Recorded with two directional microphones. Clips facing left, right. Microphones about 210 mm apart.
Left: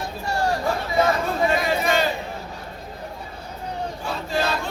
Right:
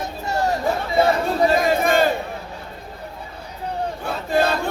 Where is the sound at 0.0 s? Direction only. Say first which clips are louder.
Right 2 dB; 20° right (ahead or behind); by 2.0 s 50° right (ahead or behind).